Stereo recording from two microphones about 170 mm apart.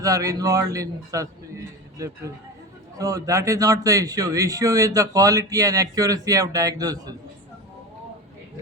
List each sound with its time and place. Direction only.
0.0 s a man's voice: 20° right (ahead or behind)